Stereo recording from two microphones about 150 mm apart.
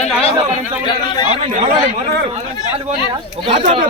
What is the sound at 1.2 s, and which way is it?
Speech, 45° right (ahead or behind).